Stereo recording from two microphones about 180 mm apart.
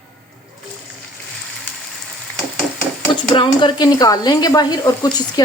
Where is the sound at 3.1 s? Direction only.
25° left (ahead or behind).